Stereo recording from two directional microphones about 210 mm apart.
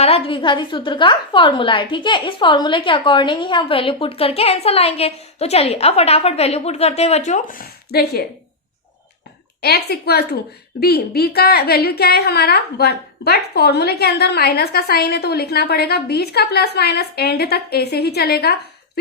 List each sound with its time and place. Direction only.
0.0 s a woman's voice: 25° left (ahead or behind); by 8.2 s 45° left (ahead or behind)
9.6 s a woman's voice: 50° left (ahead or behind)